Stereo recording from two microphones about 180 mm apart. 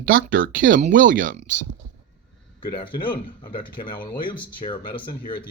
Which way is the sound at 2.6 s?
25° left (ahead or behind).